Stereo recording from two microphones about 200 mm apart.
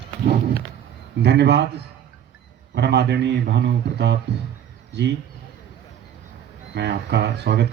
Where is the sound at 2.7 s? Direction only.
60° right (ahead or behind).